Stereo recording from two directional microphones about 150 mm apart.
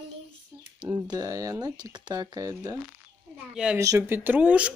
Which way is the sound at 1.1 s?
25° right (ahead or behind).